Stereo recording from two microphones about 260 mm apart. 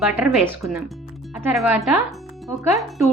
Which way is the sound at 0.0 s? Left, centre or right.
Centre.